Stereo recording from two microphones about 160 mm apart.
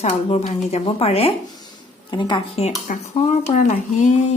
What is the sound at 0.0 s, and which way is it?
Speech, 45° left (ahead or behind).